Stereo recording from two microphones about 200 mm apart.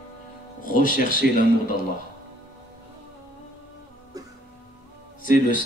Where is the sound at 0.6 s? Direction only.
45° left (ahead or behind).